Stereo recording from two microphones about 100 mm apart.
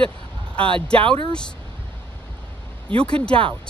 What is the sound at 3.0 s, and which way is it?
Speech, 10° left (ahead or behind).